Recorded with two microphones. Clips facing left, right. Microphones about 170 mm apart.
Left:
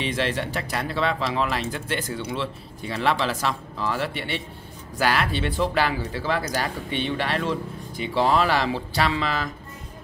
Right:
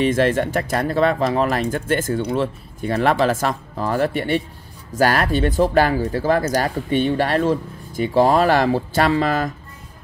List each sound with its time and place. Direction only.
0.0 s speech: 50° right (ahead or behind)